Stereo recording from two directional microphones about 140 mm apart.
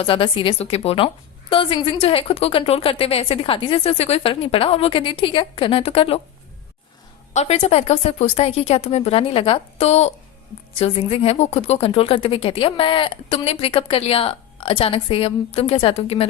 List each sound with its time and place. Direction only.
0.0 s a woman's voice: 40° left (ahead or behind)
7.3 s a woman's voice: 50° left (ahead or behind)